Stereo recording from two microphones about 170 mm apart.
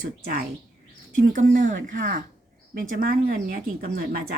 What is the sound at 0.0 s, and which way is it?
Speech, 55° right (ahead or behind).